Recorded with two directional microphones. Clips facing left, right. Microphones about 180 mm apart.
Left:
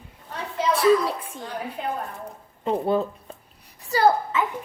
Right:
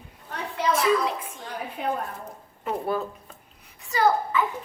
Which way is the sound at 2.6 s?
25° left (ahead or behind).